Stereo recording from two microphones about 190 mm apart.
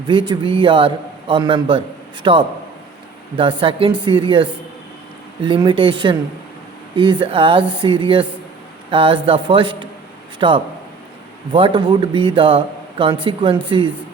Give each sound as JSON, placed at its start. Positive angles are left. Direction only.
{"t": 0.1, "sound": "a man's voice", "side_deg": -25}